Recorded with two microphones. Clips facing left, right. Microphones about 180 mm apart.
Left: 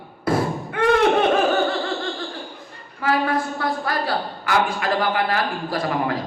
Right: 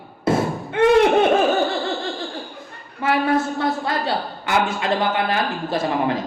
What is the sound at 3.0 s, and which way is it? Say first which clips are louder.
A woman's voice: right 2 dB; 25° right (ahead or behind).